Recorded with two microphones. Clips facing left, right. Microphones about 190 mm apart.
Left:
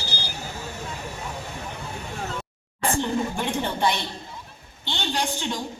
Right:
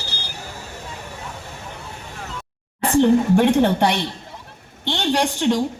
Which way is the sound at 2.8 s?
75° right (ahead or behind).